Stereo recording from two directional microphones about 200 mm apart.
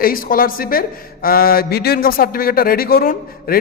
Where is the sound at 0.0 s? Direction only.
45° left (ahead or behind).